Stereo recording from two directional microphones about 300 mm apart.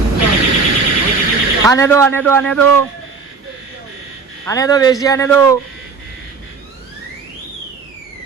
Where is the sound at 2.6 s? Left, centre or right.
Right.